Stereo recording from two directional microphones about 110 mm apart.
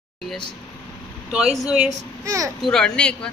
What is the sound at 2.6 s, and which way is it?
Speech, 5° left (ahead or behind).